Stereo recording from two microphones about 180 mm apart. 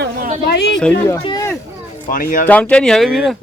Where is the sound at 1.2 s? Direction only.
20° left (ahead or behind).